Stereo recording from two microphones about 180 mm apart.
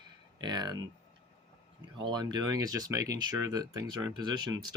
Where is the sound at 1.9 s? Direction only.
25° right (ahead or behind).